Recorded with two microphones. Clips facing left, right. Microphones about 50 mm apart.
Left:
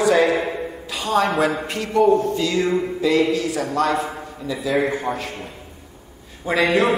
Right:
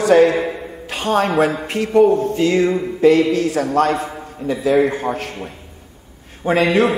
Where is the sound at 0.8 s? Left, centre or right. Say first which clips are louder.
Right 3 dB; right.